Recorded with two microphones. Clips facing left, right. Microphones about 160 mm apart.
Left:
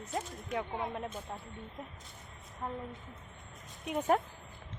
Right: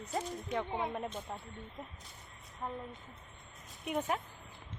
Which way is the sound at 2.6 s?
5° left (ahead or behind).